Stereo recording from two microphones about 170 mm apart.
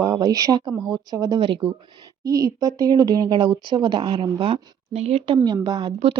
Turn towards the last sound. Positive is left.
turn(degrees=-25)  # may be behind; listen again after turning